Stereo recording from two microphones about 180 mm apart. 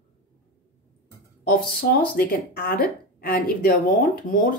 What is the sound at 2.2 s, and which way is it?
A woman's voice, 55° left (ahead or behind).